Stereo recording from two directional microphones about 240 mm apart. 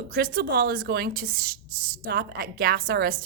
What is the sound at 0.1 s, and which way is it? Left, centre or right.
A woman's voice, right.